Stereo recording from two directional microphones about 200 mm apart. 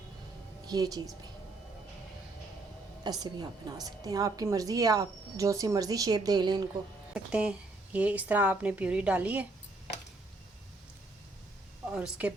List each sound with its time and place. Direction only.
0.7 s a woman's voice: 20° right (ahead or behind)
3.0 s a woman's voice: 20° right (ahead or behind)
7.1 s a woman's voice: 5° right (ahead or behind)
11.9 s a woman's voice: 5° right (ahead or behind)